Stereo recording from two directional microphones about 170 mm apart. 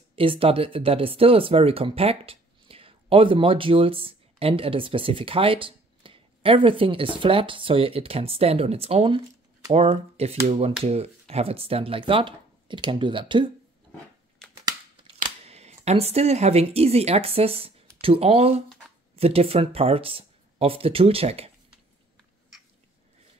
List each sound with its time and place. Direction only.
0.1 s speech: 35° right (ahead or behind)
15.1 s speech: 40° right (ahead or behind)